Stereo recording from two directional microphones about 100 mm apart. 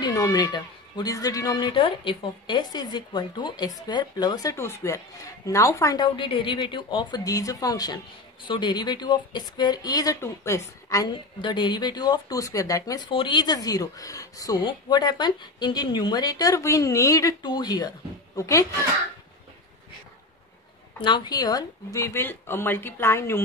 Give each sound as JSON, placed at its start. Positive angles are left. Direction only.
{"t": 0.0, "sound": "a woman's voice", "side_deg": 35}
{"t": 5.9, "sound": "speech", "side_deg": 55}
{"t": 11.4, "sound": "speech", "side_deg": 50}
{"t": 13.1, "sound": "a woman's voice", "side_deg": 55}
{"t": 14.6, "sound": "a woman's voice", "side_deg": 50}
{"t": 17.4, "sound": "a woman's voice", "side_deg": 45}
{"t": 21.0, "sound": "speech", "side_deg": 50}